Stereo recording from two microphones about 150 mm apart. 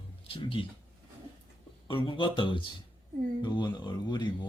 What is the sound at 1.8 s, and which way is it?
Speech, 35° left (ahead or behind).